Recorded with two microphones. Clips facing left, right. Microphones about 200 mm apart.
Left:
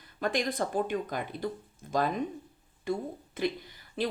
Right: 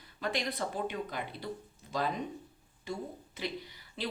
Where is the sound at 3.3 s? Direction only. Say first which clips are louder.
Left 7 dB; 50° left (ahead or behind).